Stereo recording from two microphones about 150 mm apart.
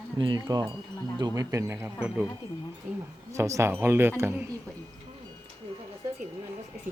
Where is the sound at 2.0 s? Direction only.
5° right (ahead or behind).